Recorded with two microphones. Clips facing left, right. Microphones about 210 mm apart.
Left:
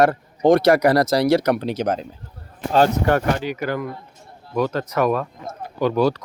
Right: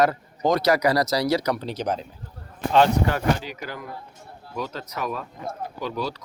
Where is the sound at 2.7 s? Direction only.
40° left (ahead or behind).